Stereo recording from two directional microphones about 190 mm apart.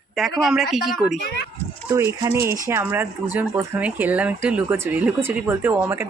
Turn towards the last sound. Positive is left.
turn(degrees=-10)  # may be behind; listen again after turning